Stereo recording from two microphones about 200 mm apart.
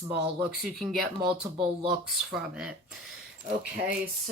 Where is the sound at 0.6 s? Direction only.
Centre (ahead or behind).